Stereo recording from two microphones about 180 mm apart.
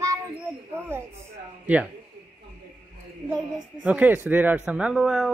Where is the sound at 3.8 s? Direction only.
10° right (ahead or behind).